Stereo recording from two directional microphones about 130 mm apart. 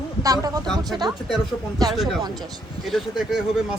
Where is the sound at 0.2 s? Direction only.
30° right (ahead or behind).